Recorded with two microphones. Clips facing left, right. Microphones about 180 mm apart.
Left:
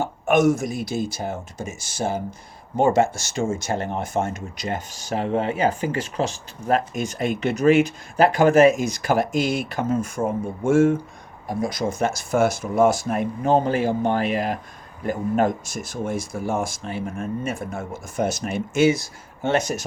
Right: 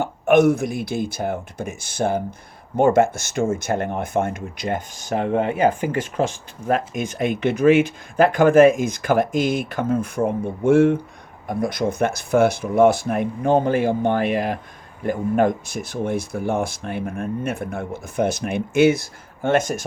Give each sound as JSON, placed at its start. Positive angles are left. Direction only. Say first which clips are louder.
{"t": 0.0, "sound": "speech", "louder": "right 3 dB", "side_deg": -60}